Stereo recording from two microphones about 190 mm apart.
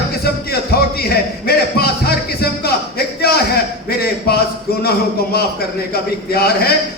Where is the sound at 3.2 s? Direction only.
55° left (ahead or behind).